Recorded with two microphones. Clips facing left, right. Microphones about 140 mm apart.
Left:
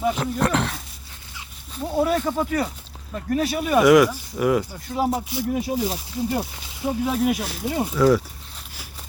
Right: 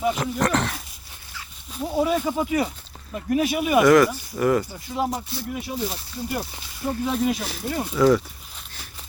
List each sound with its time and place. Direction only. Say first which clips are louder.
0.0 s speech: left 1 dB; centre (ahead or behind)
3.8 s speech: left 2 dB; 10° left (ahead or behind)
5.5 s speech: left 2 dB; 30° left (ahead or behind)
6.4 s speech: left 2 dB; 15° left (ahead or behind)
7.1 s speech: even; 5° left (ahead or behind)